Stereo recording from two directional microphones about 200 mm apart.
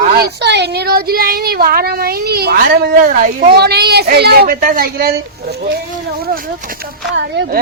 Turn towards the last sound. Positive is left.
turn(degrees=-60)  # may be behind; listen again after turning